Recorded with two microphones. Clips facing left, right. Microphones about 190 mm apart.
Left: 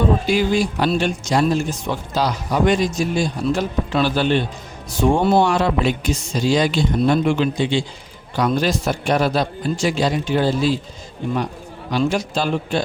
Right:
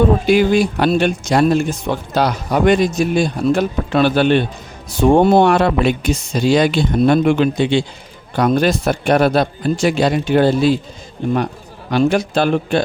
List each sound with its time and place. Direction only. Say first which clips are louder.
0.3 s speech: right 5 dB; 60° right (ahead or behind)
11.9 s speech: right 5 dB; 60° right (ahead or behind)